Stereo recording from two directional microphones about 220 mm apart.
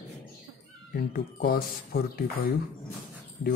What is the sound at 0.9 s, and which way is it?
Speech, 45° left (ahead or behind).